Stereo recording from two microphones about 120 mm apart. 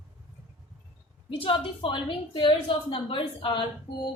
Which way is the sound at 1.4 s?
45° left (ahead or behind).